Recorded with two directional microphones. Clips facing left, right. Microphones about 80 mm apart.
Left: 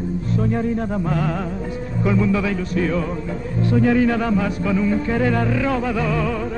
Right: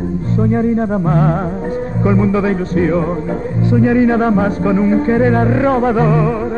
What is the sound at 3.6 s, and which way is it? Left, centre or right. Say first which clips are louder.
Music: right 4 dB; right.